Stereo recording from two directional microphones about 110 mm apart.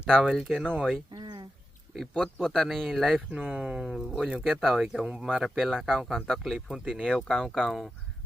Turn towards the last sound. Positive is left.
turn(degrees=0)  # may be behind; listen again after turning